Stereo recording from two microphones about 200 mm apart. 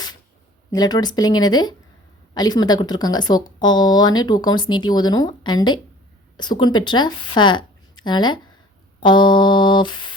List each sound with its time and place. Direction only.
0.7 s speech: 20° left (ahead or behind)